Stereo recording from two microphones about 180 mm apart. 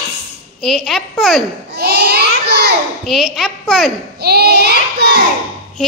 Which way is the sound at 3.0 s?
Centre (ahead or behind).